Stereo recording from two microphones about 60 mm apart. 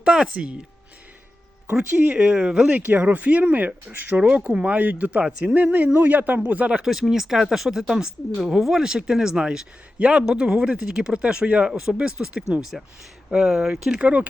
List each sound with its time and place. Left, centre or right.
0.0 s speech: centre
2.1 s speech: centre
2.4 s speech: centre
2.7 s speech: right; by 14.0 s centre
14.0 s speech: right